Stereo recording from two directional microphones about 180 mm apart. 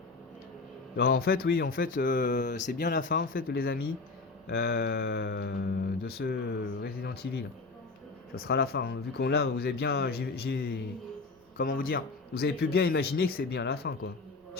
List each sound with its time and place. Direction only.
0.9 s speech: 60° left (ahead or behind)
2.7 s speech: 70° left (ahead or behind)
3.0 s speech: 50° left (ahead or behind)